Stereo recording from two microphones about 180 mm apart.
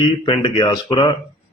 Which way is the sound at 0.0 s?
30° left (ahead or behind).